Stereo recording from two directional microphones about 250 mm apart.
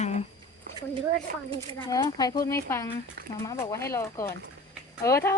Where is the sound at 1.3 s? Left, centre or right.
Right.